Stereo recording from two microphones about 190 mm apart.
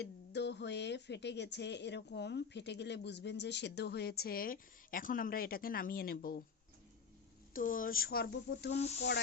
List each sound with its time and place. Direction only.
0.0 s a woman's voice: 65° left (ahead or behind)
7.5 s speech: 45° left (ahead or behind)
8.7 s sizzle: 35° left (ahead or behind)